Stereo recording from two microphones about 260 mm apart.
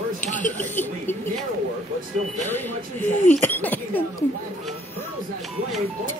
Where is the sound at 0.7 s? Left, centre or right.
Centre.